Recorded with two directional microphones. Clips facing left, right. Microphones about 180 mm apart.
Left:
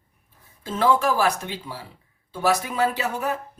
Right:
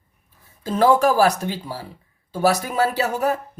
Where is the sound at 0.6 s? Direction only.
40° right (ahead or behind).